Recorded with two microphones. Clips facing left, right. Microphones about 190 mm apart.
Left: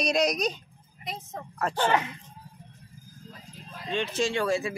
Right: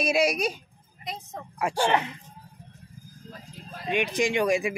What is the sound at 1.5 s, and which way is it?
Speech, 10° right (ahead or behind).